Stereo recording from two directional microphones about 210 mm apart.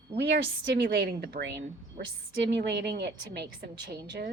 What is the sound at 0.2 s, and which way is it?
A woman's voice, 55° right (ahead or behind).